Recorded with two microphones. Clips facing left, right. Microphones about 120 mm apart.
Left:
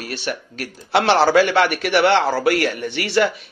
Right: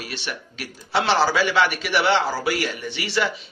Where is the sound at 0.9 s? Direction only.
60° left (ahead or behind).